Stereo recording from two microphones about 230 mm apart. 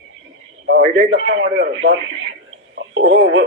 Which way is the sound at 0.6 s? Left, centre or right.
Right.